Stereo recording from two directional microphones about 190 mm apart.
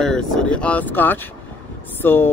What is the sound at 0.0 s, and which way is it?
Speech, 5° left (ahead or behind).